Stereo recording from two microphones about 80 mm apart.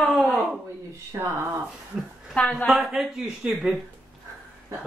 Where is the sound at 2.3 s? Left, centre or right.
Centre.